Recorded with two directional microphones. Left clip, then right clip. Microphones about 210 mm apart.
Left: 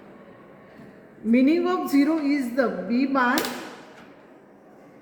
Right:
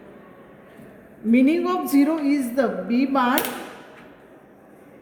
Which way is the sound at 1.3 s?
35° right (ahead or behind).